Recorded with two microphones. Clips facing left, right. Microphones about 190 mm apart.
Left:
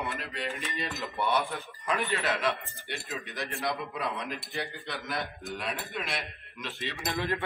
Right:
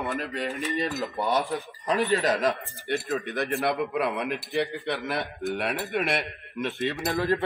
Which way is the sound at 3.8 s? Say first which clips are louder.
Right 8 dB; 70° right (ahead or behind).